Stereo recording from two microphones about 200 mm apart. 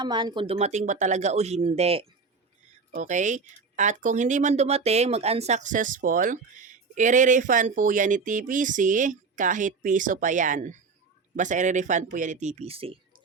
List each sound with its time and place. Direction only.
0.0 s speech: 20° right (ahead or behind)